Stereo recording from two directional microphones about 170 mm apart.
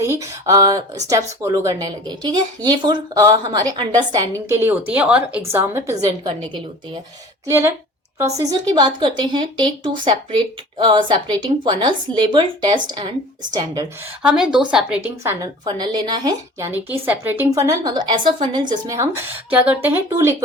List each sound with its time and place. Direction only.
0.0 s speech: 15° right (ahead or behind)
7.4 s a woman's voice: 15° right (ahead or behind)
14.2 s a woman's voice: 5° right (ahead or behind); by 16.6 s 25° right (ahead or behind)
17.1 s a woman's voice: 10° right (ahead or behind)